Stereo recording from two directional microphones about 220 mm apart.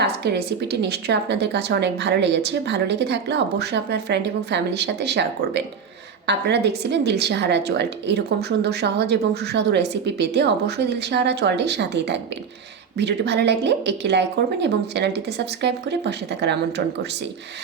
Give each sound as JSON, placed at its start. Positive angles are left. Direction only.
{"t": 0.0, "sound": "a woman's voice", "side_deg": -50}